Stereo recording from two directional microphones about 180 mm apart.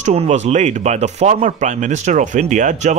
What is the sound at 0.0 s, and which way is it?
Speech, 40° right (ahead or behind).